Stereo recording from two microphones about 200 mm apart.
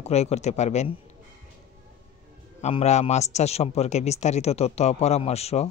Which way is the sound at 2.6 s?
30° left (ahead or behind).